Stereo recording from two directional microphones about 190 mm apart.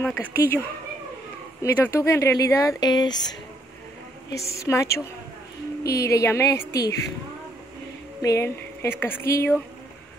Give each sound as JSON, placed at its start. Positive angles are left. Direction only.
{"t": 0.0, "sound": "speech", "side_deg": 10}
{"t": 4.4, "sound": "speech", "side_deg": 15}
{"t": 5.9, "sound": "speech", "side_deg": 15}
{"t": 8.2, "sound": "speech", "side_deg": 15}